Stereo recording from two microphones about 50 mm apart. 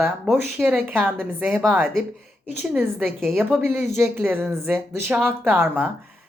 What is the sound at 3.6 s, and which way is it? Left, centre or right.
Speech, right.